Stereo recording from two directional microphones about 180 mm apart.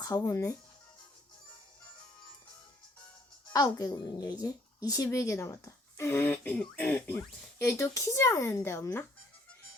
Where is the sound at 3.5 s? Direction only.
20° left (ahead or behind).